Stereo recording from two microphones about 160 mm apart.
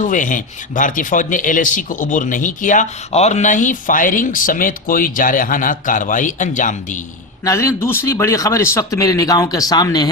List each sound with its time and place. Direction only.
0.0 s a man's voice: 55° left (ahead or behind)
7.4 s a man's voice: 20° left (ahead or behind)